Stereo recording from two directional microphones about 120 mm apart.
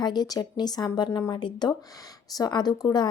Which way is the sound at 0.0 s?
35° left (ahead or behind).